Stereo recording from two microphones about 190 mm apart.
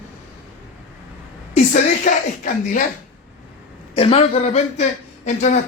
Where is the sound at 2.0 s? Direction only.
45° left (ahead or behind).